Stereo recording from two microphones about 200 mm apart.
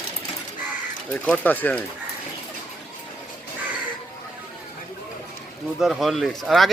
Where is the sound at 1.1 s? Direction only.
5° left (ahead or behind).